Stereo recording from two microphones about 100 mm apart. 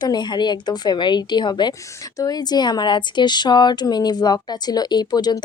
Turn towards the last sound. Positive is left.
turn(degrees=40)  # may be behind; listen again after turning